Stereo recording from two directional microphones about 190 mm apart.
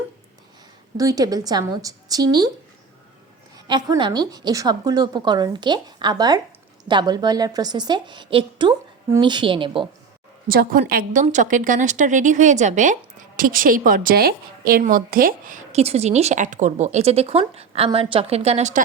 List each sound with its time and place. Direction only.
0.9 s a woman's voice: 20° right (ahead or behind)
3.7 s a woman's voice: 20° right (ahead or behind)
10.5 s a woman's voice: 50° right (ahead or behind)